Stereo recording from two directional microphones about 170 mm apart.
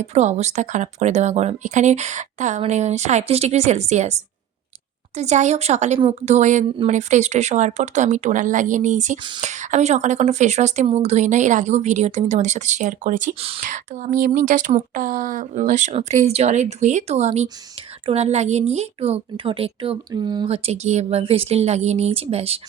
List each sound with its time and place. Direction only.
0.0 s a woman's voice: 40° right (ahead or behind)